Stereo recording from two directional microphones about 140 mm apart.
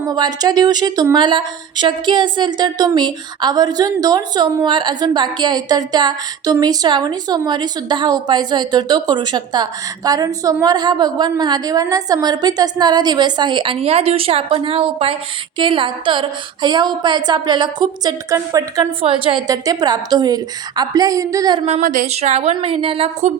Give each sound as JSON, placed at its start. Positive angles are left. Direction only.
{"t": 0.0, "sound": "speech", "side_deg": -25}
{"t": 19.0, "sound": "speech", "side_deg": -40}
{"t": 19.5, "sound": "a woman's voice", "side_deg": -25}
{"t": 21.7, "sound": "speech", "side_deg": -70}
{"t": 22.1, "sound": "a woman's voice", "side_deg": -50}